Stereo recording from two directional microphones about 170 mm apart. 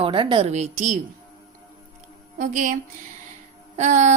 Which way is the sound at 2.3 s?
50° right (ahead or behind).